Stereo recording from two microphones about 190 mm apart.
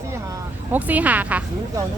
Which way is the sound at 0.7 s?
10° right (ahead or behind).